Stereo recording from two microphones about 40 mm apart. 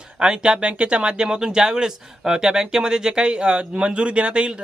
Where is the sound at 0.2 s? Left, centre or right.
Right.